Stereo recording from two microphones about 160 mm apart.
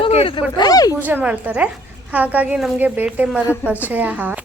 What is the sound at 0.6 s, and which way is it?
Speech, 25° left (ahead or behind).